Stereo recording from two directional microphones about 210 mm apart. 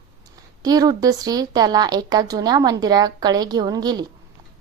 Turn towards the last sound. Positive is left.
turn(degrees=-20)  # may be behind; listen again after turning